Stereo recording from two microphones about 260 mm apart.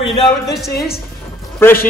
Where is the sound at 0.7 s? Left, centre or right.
Left.